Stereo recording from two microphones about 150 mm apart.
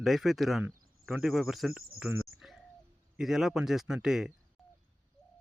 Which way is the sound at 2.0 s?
Centre (ahead or behind).